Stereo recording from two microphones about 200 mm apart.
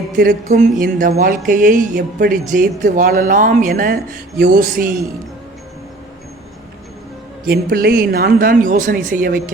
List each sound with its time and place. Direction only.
0.2 s speech: 45° right (ahead or behind)
7.4 s speech: 50° right (ahead or behind)